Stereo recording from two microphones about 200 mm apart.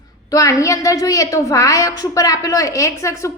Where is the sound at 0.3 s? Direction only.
15° left (ahead or behind).